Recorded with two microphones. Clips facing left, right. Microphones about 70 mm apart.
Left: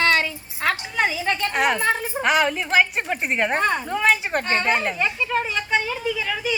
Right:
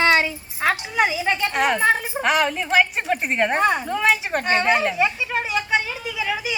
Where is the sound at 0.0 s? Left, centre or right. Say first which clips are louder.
Right 2 dB; centre.